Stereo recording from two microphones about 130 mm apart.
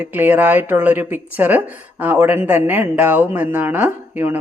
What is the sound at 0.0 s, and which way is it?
Speech, 15° right (ahead or behind).